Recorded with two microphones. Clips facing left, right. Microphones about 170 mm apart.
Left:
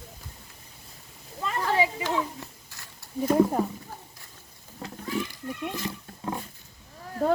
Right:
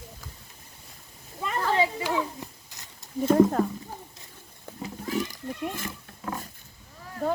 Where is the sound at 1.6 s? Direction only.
15° left (ahead or behind).